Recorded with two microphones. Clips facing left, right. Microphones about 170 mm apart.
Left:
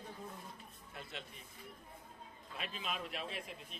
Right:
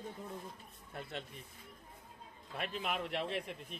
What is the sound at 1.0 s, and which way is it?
Speech, 50° right (ahead or behind).